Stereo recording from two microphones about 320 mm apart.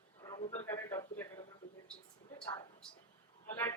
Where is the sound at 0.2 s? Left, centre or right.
Centre.